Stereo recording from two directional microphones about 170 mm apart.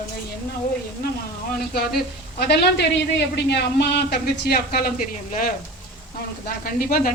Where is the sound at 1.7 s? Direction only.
65° left (ahead or behind).